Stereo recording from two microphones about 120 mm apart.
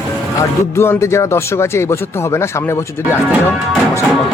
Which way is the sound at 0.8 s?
20° left (ahead or behind).